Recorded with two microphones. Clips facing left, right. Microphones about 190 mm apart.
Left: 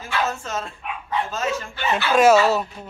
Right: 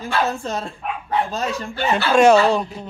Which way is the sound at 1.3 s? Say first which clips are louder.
Right 1 dB; 35° right (ahead or behind).